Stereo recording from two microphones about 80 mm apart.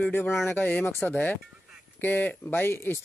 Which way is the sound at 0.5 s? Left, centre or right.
Centre.